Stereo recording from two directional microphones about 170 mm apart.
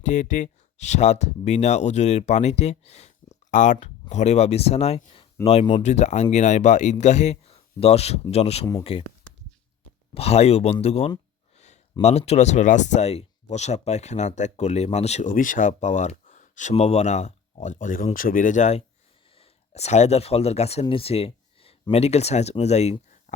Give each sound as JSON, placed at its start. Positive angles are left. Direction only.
{"t": 0.0, "sound": "speech", "side_deg": 45}
{"t": 10.2, "sound": "speech", "side_deg": 40}
{"t": 11.5, "sound": "a sound", "side_deg": 40}
{"t": 12.0, "sound": "speech", "side_deg": 40}